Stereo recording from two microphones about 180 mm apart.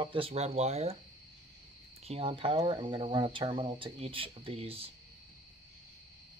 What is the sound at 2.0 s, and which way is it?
Speech, 30° right (ahead or behind).